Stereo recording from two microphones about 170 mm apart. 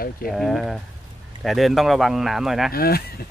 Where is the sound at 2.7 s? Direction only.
60° left (ahead or behind).